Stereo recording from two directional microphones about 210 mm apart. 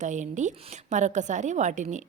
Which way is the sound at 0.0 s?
35° right (ahead or behind).